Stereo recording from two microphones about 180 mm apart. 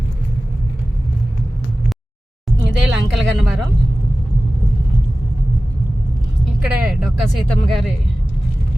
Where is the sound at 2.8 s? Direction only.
Centre (ahead or behind).